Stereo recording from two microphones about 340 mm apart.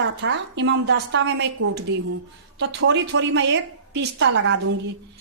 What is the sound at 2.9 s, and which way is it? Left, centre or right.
Speech, right.